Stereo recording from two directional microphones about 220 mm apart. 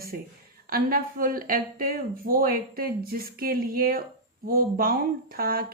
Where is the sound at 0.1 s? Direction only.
40° right (ahead or behind).